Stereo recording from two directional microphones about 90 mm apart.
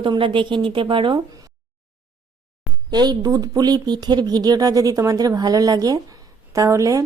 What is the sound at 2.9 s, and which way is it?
Speech, 50° right (ahead or behind).